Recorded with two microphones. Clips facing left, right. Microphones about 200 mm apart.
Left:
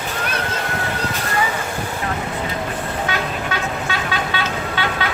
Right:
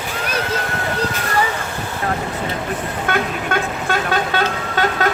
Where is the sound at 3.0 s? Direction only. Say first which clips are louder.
Right 6 dB; 50° right (ahead or behind).